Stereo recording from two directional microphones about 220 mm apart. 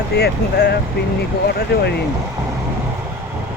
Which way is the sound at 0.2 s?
50° left (ahead or behind).